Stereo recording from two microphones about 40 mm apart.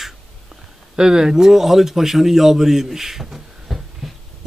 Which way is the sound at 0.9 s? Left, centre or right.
Centre.